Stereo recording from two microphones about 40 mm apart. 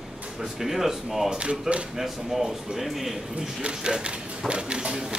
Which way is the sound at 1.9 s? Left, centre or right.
Centre.